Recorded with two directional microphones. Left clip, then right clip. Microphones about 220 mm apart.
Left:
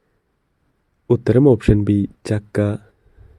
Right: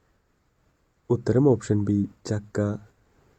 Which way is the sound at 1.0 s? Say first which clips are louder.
Left 7 dB; 30° left (ahead or behind).